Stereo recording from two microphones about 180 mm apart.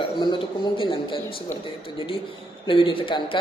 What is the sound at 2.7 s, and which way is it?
Speech, 30° left (ahead or behind).